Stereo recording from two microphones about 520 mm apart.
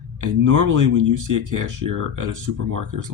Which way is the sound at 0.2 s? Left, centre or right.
Right.